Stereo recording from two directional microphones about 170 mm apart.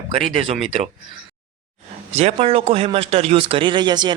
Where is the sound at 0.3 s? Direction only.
35° right (ahead or behind).